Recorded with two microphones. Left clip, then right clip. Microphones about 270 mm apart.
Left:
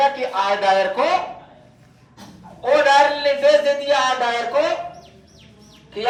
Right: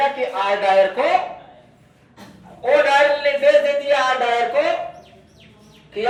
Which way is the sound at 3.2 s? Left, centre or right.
Left.